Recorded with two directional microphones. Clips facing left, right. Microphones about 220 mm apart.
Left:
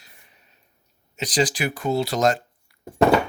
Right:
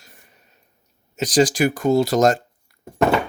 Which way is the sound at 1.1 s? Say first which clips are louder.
Right 6 dB; 45° right (ahead or behind).